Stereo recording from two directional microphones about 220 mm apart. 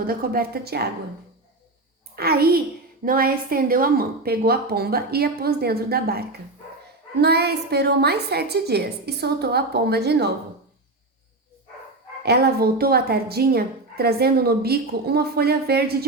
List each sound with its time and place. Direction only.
0.1 s a woman's voice: 40° right (ahead or behind)
2.1 s a woman's voice: 45° right (ahead or behind)
12.2 s a woman's voice: 45° right (ahead or behind)